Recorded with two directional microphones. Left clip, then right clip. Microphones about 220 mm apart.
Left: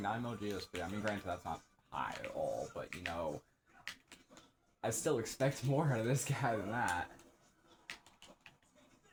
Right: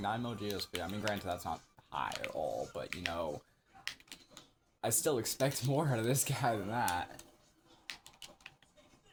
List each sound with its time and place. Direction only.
0.0 s speech: 55° right (ahead or behind)
4.8 s speech: 55° right (ahead or behind)